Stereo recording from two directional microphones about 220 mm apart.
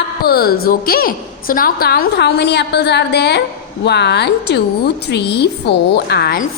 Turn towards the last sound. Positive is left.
turn(degrees=45)  # may be behind; listen again after turning